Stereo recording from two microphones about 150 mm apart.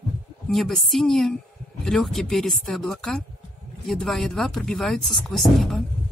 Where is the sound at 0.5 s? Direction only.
Centre (ahead or behind).